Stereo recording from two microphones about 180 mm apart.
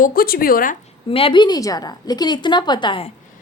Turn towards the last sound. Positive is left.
turn(degrees=25)  # may be behind; listen again after turning